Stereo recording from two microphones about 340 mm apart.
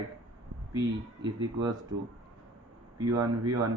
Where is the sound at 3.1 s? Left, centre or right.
Centre.